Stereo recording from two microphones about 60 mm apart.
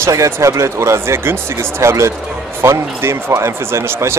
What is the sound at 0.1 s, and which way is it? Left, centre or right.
Speech, right.